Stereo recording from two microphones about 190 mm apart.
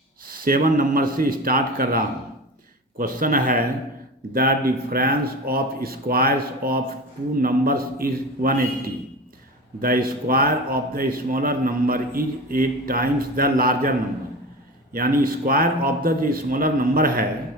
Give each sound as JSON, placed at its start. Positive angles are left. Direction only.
{"t": 0.3, "sound": "a man's voice", "side_deg": -50}
{"t": 14.9, "sound": "a man's voice", "side_deg": -50}